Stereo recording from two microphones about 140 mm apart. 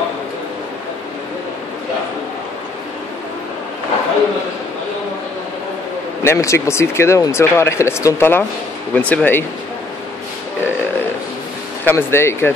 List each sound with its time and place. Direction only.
6.2 s speech: 20° left (ahead or behind)
11.8 s speech: 15° left (ahead or behind)